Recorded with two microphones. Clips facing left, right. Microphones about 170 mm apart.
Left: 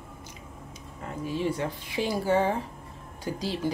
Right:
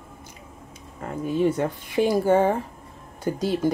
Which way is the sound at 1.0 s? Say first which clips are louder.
Right 7 dB; 50° right (ahead or behind).